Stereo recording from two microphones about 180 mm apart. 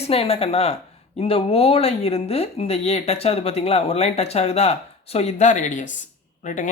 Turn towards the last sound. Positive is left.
turn(degrees=45)  # may be behind; listen again after turning